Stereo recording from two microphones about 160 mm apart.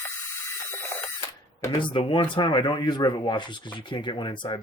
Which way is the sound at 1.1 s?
25° left (ahead or behind).